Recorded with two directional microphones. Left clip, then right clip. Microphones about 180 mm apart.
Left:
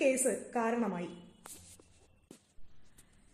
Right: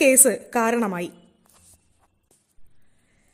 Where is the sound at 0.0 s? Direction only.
45° right (ahead or behind).